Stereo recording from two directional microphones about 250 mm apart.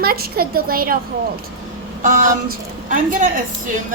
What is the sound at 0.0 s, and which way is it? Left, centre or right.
Speech, right.